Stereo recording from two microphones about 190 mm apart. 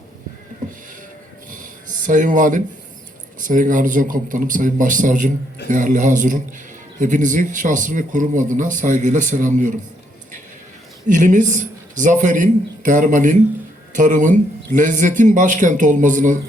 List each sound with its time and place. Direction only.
1.5 s a sound: 45° right (ahead or behind)
3.4 s a man's voice: 45° right (ahead or behind)
11.1 s speech: 40° right (ahead or behind)